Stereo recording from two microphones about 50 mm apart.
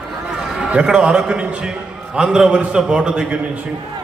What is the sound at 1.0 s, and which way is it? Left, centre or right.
A man's voice, right.